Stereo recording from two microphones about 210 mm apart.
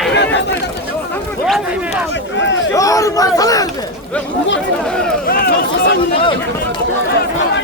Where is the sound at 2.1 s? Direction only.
60° left (ahead or behind).